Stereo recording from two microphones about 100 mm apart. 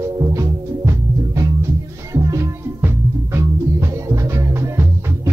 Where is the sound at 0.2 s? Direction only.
35° right (ahead or behind).